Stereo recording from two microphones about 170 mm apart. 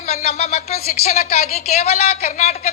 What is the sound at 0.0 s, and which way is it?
Speech, 40° left (ahead or behind).